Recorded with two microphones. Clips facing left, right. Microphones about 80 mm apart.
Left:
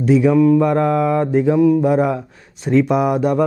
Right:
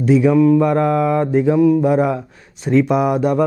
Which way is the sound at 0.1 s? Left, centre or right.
Centre.